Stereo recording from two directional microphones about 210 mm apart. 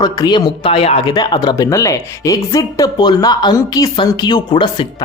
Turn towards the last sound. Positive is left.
turn(degrees=20)  # may be behind; listen again after turning